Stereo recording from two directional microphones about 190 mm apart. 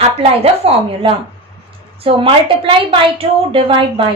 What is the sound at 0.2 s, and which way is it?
A woman's voice, 30° right (ahead or behind).